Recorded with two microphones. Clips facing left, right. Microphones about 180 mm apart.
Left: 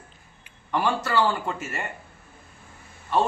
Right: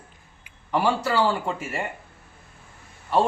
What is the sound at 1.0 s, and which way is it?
Speech, 10° right (ahead or behind).